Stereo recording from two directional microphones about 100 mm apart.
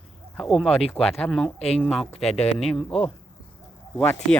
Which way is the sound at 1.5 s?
90° left.